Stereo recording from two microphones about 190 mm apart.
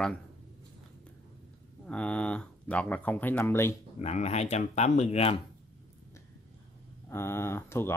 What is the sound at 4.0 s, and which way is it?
Speech, 35° left (ahead or behind).